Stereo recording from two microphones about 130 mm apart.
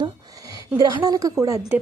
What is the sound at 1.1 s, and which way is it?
Speech, 25° right (ahead or behind).